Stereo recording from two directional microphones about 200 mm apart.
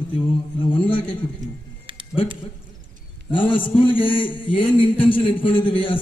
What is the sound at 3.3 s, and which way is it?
A man's voice, 25° left (ahead or behind).